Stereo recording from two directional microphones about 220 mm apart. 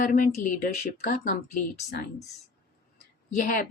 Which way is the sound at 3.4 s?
40° left (ahead or behind).